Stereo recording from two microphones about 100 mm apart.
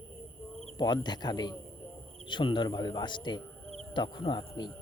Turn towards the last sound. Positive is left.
turn(degrees=50)  # may be behind; listen again after turning